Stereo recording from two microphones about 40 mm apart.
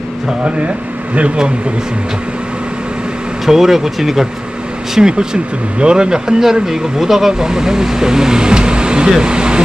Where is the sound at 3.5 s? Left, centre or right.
Centre.